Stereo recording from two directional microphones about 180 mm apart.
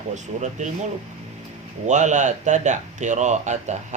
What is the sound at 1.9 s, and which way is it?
Speech, 40° right (ahead or behind).